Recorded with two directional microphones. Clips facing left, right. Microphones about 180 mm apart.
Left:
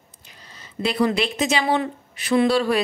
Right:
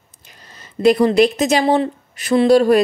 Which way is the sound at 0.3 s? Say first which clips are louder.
Right 2 dB; 50° right (ahead or behind).